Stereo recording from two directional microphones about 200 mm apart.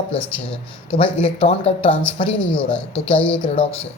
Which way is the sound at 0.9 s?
25° left (ahead or behind).